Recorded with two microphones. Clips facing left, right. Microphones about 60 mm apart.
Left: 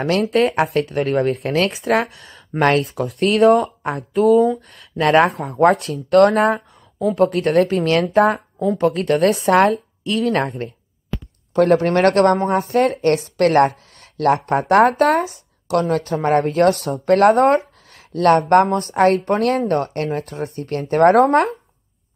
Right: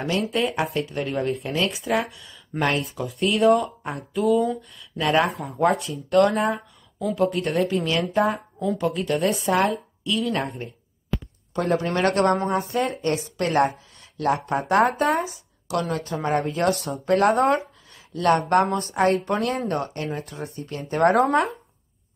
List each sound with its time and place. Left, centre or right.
0.0 s a woman's voice: left
11.5 s a woman's voice: left
17.9 s a sound: left
18.5 s a woman's voice: left